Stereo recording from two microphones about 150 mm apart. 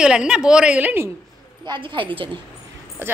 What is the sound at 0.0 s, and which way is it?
A woman's voice, 5° right (ahead or behind).